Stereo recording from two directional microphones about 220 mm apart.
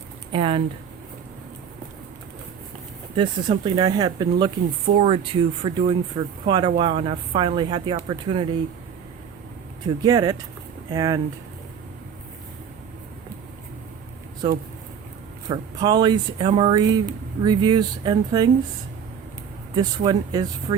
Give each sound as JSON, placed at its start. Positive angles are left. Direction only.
{"t": 0.3, "sound": "speech", "side_deg": -25}
{"t": 3.2, "sound": "speech", "side_deg": -25}
{"t": 9.8, "sound": "speech", "side_deg": -15}
{"t": 15.4, "sound": "speech", "side_deg": -20}
{"t": 19.7, "sound": "speech", "side_deg": -20}